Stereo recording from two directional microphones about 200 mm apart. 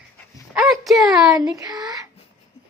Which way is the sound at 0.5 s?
Centre (ahead or behind).